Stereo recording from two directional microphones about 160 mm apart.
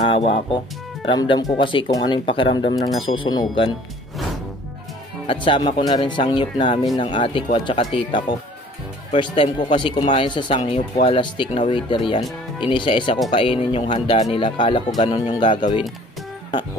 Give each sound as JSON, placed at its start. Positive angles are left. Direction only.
{"t": 0.0, "sound": "speech", "side_deg": 35}
{"t": 5.2, "sound": "speech", "side_deg": 30}